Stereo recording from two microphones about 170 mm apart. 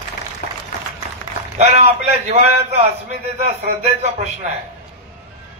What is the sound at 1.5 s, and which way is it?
Speech, 40° right (ahead or behind).